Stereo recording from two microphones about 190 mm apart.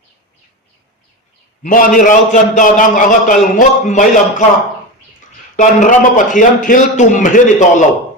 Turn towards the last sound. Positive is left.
turn(degrees=40)  # may be behind; listen again after turning